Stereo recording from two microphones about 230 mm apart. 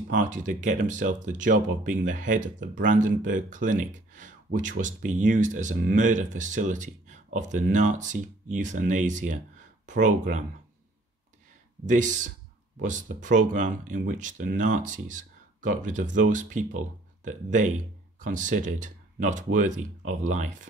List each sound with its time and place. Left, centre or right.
0.1 s speech: right
11.8 s speech: right